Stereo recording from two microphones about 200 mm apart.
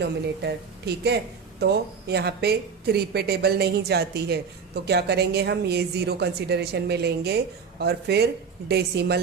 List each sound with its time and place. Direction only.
0.0 s speech: 55° right (ahead or behind)